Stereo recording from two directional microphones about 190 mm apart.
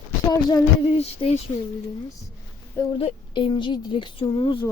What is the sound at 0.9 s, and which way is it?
Speech, 30° left (ahead or behind).